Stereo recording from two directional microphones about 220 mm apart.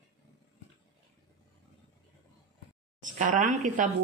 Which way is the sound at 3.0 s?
35° right (ahead or behind).